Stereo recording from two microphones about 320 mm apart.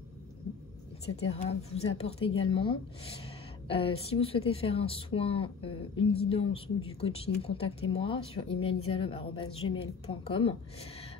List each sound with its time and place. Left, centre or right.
1.1 s speech: centre